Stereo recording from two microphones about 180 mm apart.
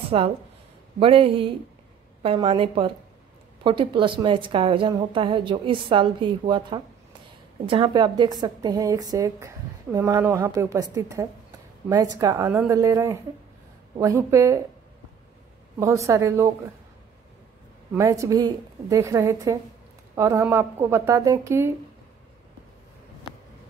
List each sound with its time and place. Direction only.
0.1 s a woman's voice: 35° right (ahead or behind); by 14.6 s 15° right (ahead or behind)
15.8 s a woman's voice: 15° right (ahead or behind)
17.9 s a woman's voice: 15° right (ahead or behind)